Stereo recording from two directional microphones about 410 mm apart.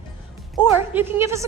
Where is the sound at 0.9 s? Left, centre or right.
Centre.